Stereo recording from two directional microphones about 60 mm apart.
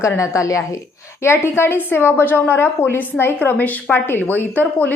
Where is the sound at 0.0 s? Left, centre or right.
Left.